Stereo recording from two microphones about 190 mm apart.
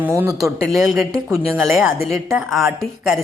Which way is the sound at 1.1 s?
15° right (ahead or behind).